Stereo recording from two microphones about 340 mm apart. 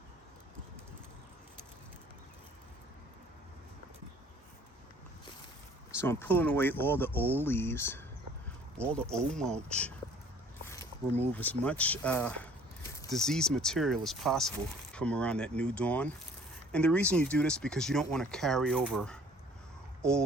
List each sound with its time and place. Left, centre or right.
6.0 s speech: centre
11.3 s speech: centre